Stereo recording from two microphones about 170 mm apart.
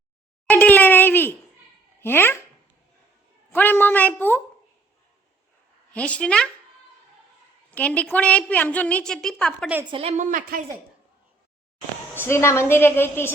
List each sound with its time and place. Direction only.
0.4 s a sound: 10° left (ahead or behind)
2.0 s speech: 15° left (ahead or behind)
3.5 s a woman's voice: 10° left (ahead or behind)
5.9 s a woman's voice: 5° left (ahead or behind)
7.7 s a woman's voice: 10° left (ahead or behind)
9.9 s a woman's voice: 35° right (ahead or behind)
12.1 s a woman's voice: 15° left (ahead or behind)